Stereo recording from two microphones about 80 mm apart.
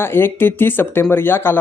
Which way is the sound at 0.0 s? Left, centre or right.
Left.